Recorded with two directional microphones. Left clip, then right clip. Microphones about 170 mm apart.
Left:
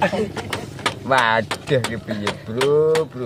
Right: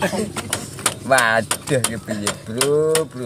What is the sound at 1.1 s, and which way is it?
Speech, 5° right (ahead or behind).